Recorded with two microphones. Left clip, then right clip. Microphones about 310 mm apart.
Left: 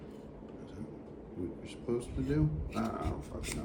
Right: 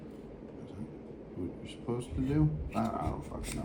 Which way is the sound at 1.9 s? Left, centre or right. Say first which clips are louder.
Even; centre.